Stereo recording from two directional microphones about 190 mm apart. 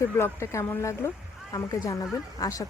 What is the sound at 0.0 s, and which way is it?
Speech, 15° left (ahead or behind).